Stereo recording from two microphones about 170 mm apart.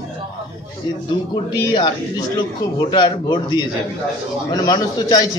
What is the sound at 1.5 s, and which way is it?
Speech, 25° left (ahead or behind).